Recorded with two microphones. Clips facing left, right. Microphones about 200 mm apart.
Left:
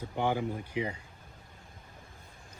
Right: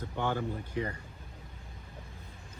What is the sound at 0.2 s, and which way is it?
Speech, 10° left (ahead or behind).